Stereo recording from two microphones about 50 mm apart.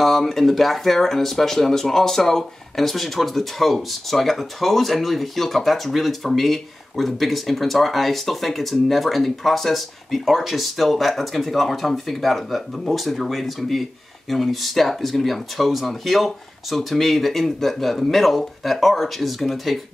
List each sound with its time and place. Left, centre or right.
0.0 s speech: centre